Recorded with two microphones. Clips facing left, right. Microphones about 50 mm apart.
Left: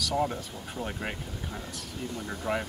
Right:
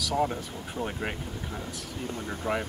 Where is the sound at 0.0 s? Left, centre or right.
Centre.